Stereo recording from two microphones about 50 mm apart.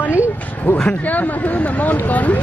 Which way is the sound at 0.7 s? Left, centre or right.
Left.